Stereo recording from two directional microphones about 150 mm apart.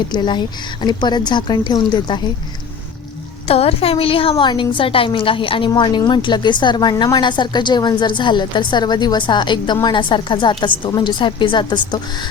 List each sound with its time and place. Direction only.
0.1 s speech: 30° left (ahead or behind)
3.4 s a woman's voice: 40° left (ahead or behind)